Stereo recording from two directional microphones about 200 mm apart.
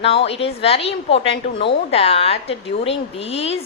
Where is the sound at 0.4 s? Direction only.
30° left (ahead or behind).